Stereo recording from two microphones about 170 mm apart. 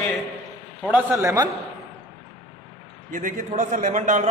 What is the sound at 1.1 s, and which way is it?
Speech, 20° right (ahead or behind).